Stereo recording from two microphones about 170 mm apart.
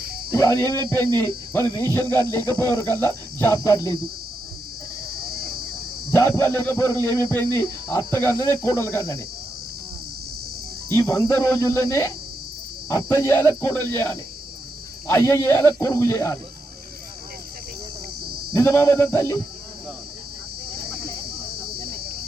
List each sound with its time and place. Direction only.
0.0 s a sound: 65° right (ahead or behind)
0.3 s speech: 20° left (ahead or behind)
0.8 s speech: 25° right (ahead or behind)
1.2 s speech: 15° left (ahead or behind)
5.1 s a sound: 65° right (ahead or behind)
6.1 s speech: 20° left (ahead or behind)
10.8 s speech: 20° left (ahead or behind)
15.1 s speech: 15° left (ahead or behind)
18.5 s speech: 15° left (ahead or behind)
20.7 s a sound: 65° right (ahead or behind)